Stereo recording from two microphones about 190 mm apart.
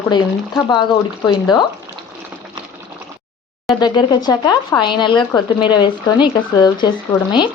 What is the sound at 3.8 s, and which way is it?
Speech, 20° left (ahead or behind).